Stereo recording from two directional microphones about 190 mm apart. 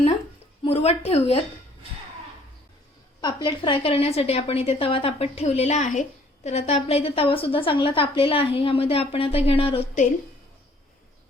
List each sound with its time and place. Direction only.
0.6 s a woman's voice: 35° left (ahead or behind)
3.2 s a woman's voice: 25° left (ahead or behind)